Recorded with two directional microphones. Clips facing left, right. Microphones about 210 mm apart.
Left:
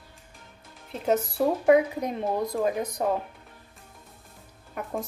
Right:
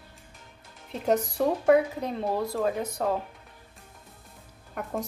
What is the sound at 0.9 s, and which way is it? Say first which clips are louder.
Speech: even; 5° left (ahead or behind).